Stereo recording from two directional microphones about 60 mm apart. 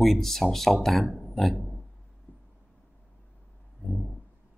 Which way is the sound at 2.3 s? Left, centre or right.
Left.